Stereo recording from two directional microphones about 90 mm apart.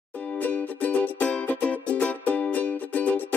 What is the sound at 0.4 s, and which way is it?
Music, 20° left (ahead or behind).